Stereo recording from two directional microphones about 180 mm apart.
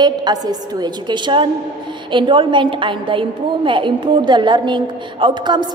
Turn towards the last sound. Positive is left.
turn(degrees=-25)  # may be behind; listen again after turning